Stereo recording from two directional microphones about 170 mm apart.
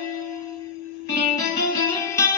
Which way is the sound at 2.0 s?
15° left (ahead or behind).